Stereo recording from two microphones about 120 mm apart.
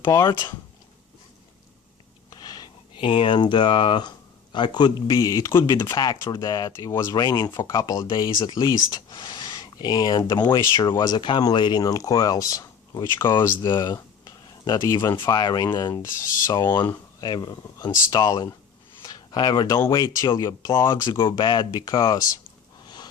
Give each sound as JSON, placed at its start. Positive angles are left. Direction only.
{"t": 0.2, "sound": "speech", "side_deg": 35}
{"t": 2.3, "sound": "speech", "side_deg": 35}
{"t": 5.6, "sound": "speech", "side_deg": 35}
{"t": 13.7, "sound": "a sound", "side_deg": 35}
{"t": 15.2, "sound": "speech", "side_deg": 40}
{"t": 19.0, "sound": "a sound", "side_deg": 35}
{"t": 19.9, "sound": "speech", "side_deg": 35}
{"t": 21.2, "sound": "speech", "side_deg": 40}